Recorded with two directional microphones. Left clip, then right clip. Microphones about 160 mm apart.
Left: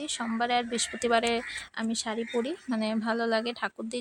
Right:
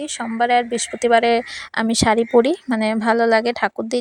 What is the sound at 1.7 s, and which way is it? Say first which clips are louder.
A woman's voice: right 17 dB; 70° right (ahead or behind).